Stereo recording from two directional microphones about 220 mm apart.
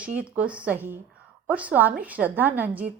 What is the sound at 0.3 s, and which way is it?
Speech, 5° right (ahead or behind).